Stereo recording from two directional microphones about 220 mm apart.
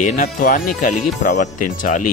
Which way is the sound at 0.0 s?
35° left (ahead or behind).